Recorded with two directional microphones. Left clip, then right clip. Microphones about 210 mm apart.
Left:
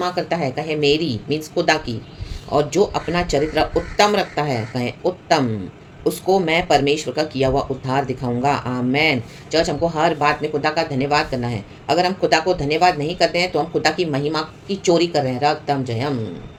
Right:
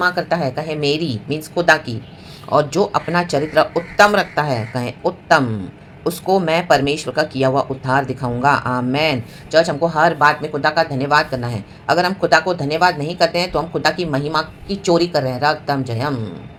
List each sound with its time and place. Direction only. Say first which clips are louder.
0.0 s speech: right 4 dB; 5° right (ahead or behind)